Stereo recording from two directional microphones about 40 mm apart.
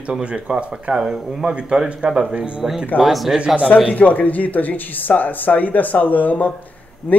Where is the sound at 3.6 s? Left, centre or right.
Left.